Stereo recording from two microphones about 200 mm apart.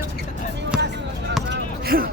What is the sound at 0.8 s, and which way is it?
Basketball bounce, 60° right (ahead or behind).